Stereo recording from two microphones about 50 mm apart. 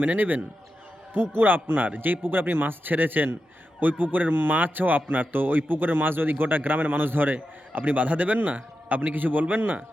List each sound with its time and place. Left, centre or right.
0.0 s speech: right
1.1 s speech: right